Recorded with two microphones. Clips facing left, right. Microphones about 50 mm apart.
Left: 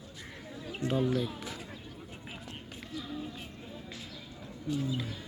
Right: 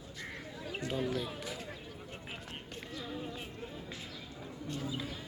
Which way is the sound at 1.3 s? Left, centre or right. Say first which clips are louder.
Even; centre.